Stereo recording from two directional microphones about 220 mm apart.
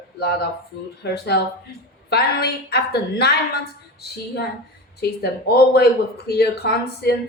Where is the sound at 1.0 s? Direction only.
50° left (ahead or behind).